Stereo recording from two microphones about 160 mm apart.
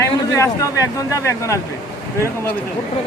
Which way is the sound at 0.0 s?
20° left (ahead or behind).